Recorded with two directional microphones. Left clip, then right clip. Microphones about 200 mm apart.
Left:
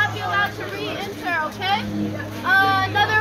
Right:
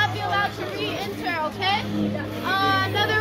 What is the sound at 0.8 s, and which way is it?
Children playing, 15° right (ahead or behind).